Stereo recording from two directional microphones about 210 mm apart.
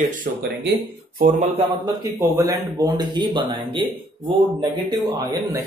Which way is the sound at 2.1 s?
15° right (ahead or behind).